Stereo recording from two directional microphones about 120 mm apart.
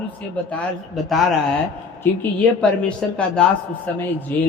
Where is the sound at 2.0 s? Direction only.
15° left (ahead or behind).